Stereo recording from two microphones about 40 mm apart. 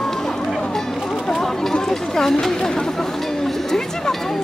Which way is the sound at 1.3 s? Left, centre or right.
Centre.